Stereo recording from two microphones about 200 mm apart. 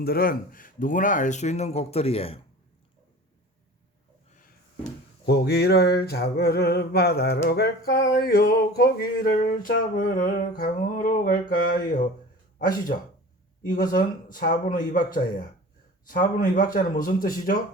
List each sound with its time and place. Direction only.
0.0 s speech: 50° left (ahead or behind); by 2.4 s 30° left (ahead or behind)
5.2 s speech: 55° left (ahead or behind)